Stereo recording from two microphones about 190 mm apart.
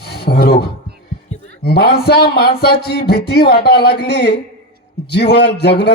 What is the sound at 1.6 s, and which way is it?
Speech, 55° left (ahead or behind).